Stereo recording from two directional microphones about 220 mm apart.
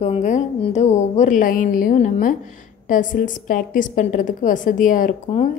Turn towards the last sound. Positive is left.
turn(degrees=35)  # may be behind; listen again after turning